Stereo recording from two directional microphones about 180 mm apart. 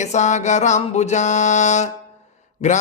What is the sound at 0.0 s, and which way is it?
Mantra, 40° left (ahead or behind).